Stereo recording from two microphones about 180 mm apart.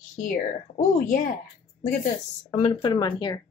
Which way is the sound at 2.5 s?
35° left (ahead or behind).